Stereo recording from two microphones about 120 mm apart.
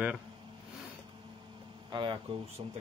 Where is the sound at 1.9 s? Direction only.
45° right (ahead or behind).